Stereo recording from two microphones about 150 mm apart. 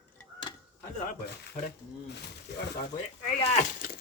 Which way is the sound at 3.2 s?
50° left (ahead or behind).